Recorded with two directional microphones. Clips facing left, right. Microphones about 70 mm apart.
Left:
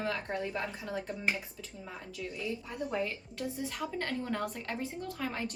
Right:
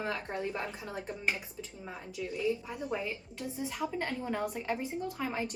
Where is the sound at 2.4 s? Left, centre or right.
Centre.